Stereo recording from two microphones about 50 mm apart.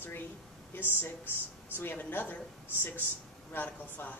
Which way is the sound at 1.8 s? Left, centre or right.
Left.